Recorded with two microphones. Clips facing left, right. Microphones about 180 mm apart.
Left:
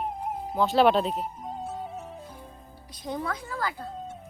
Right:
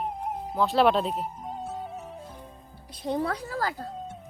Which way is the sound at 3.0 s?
30° right (ahead or behind).